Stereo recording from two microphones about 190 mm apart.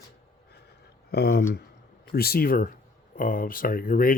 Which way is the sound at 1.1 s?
55° left (ahead or behind).